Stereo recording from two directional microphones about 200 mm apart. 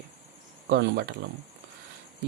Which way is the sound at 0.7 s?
60° right (ahead or behind).